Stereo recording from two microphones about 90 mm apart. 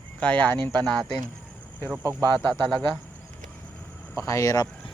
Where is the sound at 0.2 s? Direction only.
20° left (ahead or behind).